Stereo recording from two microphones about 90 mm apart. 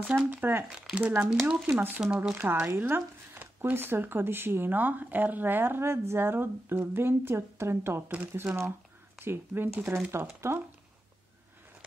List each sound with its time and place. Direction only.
0.2 s speech: 20° right (ahead or behind)
0.7 s speech: 10° right (ahead or behind); by 10.6 s 30° right (ahead or behind)